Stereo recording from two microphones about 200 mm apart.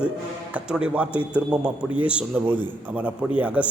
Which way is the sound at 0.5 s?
5° right (ahead or behind).